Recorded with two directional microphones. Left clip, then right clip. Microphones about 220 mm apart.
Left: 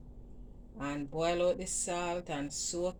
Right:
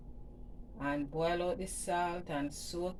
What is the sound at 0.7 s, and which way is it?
Speech, 45° left (ahead or behind).